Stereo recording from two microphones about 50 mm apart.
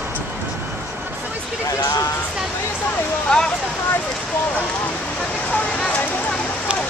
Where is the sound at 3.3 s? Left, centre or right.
Centre.